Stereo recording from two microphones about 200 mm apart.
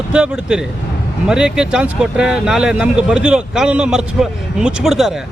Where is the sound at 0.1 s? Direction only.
5° right (ahead or behind).